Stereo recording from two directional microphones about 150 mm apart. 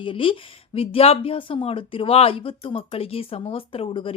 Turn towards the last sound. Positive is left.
turn(degrees=35)  # may be behind; listen again after turning